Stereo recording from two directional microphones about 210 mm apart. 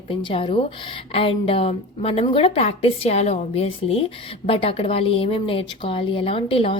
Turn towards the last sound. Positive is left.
turn(degrees=25)  # may be behind; listen again after turning